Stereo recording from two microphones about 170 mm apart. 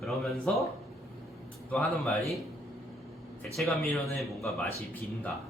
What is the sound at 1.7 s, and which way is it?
Speech, centre (ahead or behind).